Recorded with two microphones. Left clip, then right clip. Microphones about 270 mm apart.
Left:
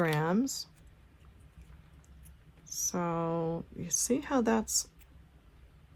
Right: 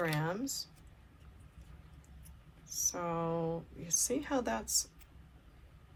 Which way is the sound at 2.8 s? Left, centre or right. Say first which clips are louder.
Left 3 dB; left.